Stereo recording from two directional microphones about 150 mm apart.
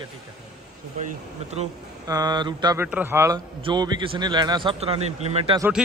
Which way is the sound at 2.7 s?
10° right (ahead or behind).